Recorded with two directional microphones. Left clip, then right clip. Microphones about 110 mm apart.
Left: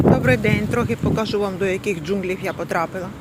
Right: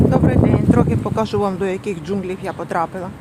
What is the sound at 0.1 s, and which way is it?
Speech, 25° right (ahead or behind).